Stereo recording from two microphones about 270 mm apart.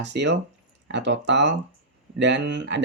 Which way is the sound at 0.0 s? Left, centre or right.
Right.